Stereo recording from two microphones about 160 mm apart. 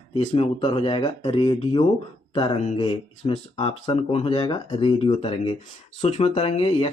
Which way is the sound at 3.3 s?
35° left (ahead or behind).